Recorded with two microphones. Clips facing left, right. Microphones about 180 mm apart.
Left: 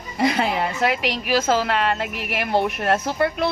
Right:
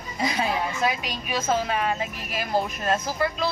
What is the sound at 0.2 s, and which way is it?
A woman's voice, 65° left (ahead or behind).